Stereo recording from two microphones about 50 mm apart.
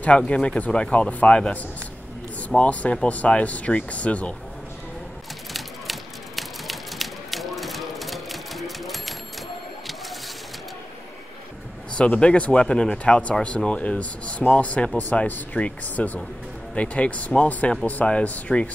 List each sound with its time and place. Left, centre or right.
0.2 s speech: centre
5.5 s a sound: centre
12.1 s speech: left